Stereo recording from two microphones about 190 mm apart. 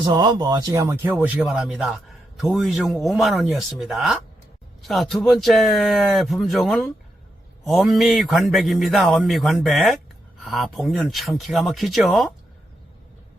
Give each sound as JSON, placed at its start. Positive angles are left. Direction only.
{"t": 0.0, "sound": "speech", "side_deg": -20}